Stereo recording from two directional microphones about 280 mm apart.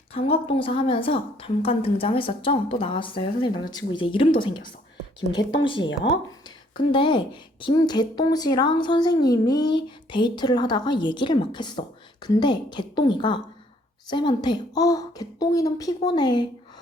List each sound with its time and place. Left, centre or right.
0.1 s a woman's voice: left
5.6 s a woman's voice: centre